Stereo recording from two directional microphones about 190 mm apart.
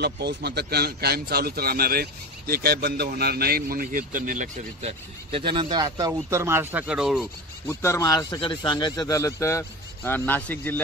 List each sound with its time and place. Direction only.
0.0 s a man's voice: 60° right (ahead or behind); by 4.9 s 45° right (ahead or behind)
5.3 s speech: 25° right (ahead or behind); by 7.2 s 5° right (ahead or behind)
7.6 s a man's voice: 15° left (ahead or behind)